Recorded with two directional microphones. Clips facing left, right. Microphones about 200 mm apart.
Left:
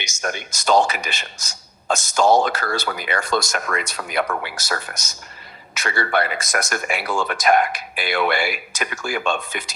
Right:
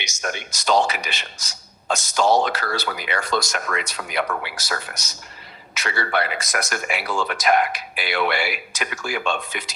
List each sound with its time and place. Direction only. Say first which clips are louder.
0.0 s speech: left 2 dB; 45° left (ahead or behind)